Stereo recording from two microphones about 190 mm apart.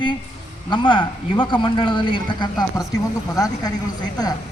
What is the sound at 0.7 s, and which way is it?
Speech, 25° left (ahead or behind).